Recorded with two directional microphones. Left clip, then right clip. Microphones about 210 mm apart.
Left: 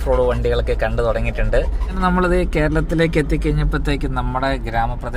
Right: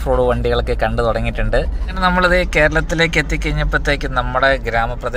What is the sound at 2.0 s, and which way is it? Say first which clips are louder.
Speech: right 4 dB; 20° left (ahead or behind).